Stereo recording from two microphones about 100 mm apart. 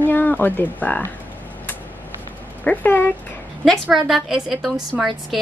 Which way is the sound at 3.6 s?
Centre (ahead or behind).